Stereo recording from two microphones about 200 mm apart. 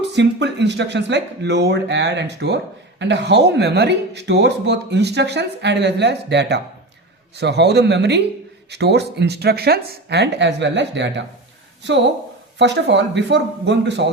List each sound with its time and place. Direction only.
0.1 s speech: 60° right (ahead or behind)